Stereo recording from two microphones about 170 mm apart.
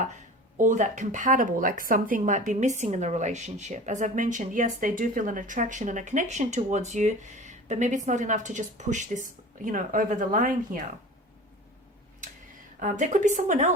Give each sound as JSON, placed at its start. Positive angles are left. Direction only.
{"t": 0.5, "sound": "speech", "side_deg": -45}
{"t": 12.8, "sound": "speech", "side_deg": -45}